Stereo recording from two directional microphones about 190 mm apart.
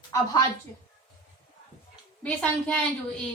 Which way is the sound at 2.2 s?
5° left (ahead or behind).